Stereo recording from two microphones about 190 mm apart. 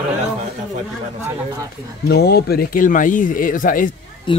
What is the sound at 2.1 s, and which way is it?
Speech, 55° left (ahead or behind).